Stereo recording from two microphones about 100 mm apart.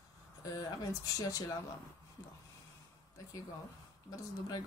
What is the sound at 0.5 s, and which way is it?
Speech, 35° left (ahead or behind).